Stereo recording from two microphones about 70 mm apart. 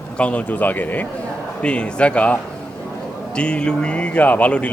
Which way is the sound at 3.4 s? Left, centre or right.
Centre.